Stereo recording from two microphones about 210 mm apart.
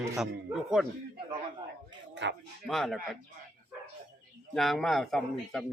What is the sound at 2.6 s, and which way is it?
Speech, centre (ahead or behind).